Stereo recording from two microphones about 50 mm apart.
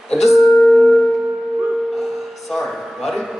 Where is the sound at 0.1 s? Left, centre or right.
Centre.